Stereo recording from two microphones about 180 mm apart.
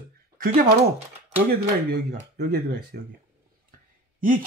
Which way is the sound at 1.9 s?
65° right (ahead or behind).